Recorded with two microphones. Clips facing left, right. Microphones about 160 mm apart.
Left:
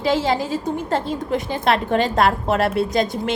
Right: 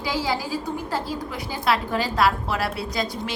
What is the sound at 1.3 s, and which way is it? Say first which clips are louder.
A woman's voice: left 5 dB; 55° left (ahead or behind).